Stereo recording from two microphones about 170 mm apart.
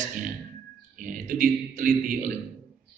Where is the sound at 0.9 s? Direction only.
50° right (ahead or behind).